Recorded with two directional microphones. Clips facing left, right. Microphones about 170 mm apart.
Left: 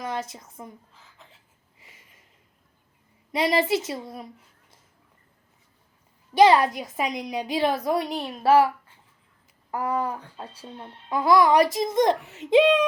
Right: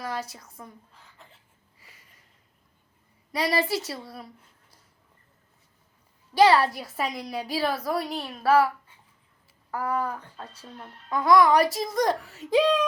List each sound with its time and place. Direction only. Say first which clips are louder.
0.0 s a woman's voice: left 2 dB; 20° left (ahead or behind)
0.9 s speech: even; centre (ahead or behind)
3.3 s speech: left 3 dB; 25° left (ahead or behind)
6.3 s speech: left 2 dB; 20° left (ahead or behind)
7.9 s a woman's voice: left 3 dB; centre (ahead or behind)
8.2 s speech: left 2 dB; 20° left (ahead or behind)
9.7 s speech: left 2 dB; 20° left (ahead or behind)